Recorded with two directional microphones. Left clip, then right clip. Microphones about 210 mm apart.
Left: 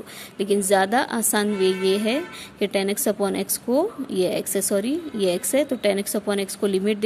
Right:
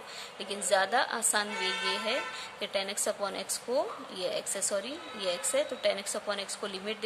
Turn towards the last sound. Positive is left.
turn(degrees=35)  # may be behind; listen again after turning